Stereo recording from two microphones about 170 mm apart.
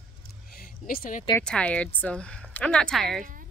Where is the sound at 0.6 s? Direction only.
60° left (ahead or behind).